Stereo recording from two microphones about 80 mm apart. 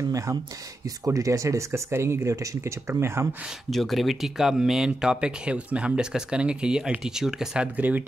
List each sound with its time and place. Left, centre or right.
0.1 s speech: right
3.7 s speech: centre